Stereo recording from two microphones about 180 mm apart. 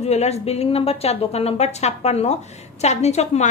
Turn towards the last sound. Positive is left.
turn(degrees=40)  # may be behind; listen again after turning